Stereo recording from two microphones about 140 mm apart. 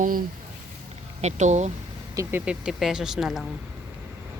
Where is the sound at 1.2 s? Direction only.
55° right (ahead or behind).